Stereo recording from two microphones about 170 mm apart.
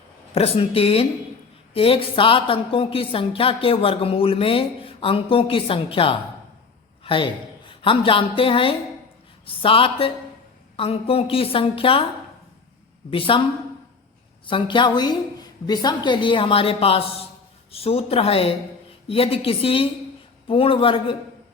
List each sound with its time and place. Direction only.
0.3 s a woman's voice: 35° left (ahead or behind)
7.0 s a sound: 30° left (ahead or behind)
7.7 s a woman's voice: 30° left (ahead or behind)
13.1 s a woman's voice: 30° left (ahead or behind)
14.4 s a woman's voice: 30° left (ahead or behind)